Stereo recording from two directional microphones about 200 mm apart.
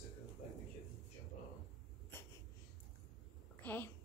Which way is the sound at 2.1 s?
10° left (ahead or behind).